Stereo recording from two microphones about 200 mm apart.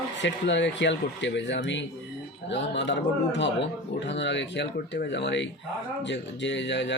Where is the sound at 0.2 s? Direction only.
65° left (ahead or behind).